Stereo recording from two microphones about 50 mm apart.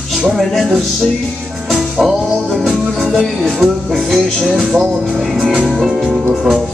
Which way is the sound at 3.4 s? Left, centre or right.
Centre.